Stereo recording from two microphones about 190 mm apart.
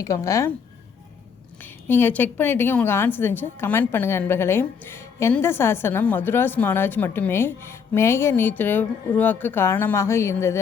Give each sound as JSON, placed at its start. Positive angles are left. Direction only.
{"t": 0.0, "sound": "a woman's voice", "side_deg": 15}
{"t": 1.6, "sound": "a woman's voice", "side_deg": 10}